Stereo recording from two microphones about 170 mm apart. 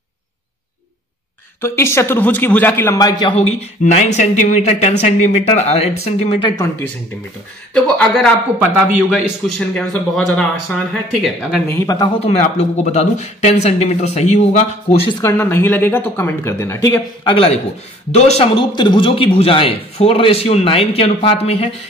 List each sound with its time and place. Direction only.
1.6 s speech: 15° left (ahead or behind)
3.3 s a man's voice: 40° left (ahead or behind)
7.7 s speech: centre (ahead or behind)
11.8 s speech: 20° left (ahead or behind)
12.3 s a man's voice: 40° left (ahead or behind)
15.2 s speech: 15° left (ahead or behind)
17.2 s a man's voice: 35° left (ahead or behind)